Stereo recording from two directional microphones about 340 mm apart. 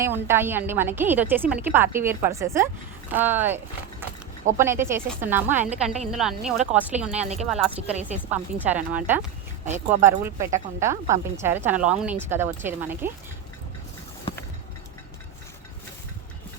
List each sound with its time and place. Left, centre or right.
0.0 s a woman's voice: centre
7.2 s speech: centre
8.0 s a woman's voice: centre